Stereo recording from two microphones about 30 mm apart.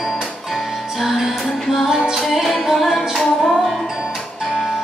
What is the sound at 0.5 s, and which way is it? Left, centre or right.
Music, centre.